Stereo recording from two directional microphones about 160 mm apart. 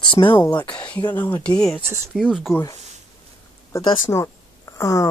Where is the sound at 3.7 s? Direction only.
20° left (ahead or behind).